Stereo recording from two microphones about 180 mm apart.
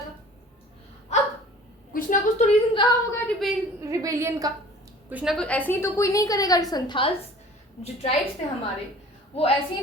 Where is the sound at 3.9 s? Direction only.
15° right (ahead or behind).